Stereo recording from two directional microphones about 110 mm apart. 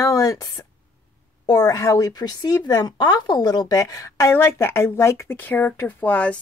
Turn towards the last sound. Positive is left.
turn(degrees=15)  # may be behind; listen again after turning